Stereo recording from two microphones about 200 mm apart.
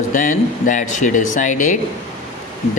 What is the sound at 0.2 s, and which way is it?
Speech, 40° left (ahead or behind).